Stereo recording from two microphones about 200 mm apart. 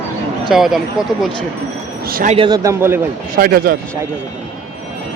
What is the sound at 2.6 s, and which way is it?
Speech, 10° right (ahead or behind).